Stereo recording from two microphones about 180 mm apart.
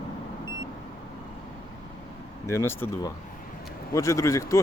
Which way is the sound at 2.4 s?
15° left (ahead or behind).